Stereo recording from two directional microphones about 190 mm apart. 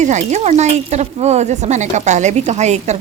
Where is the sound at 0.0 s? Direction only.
40° right (ahead or behind).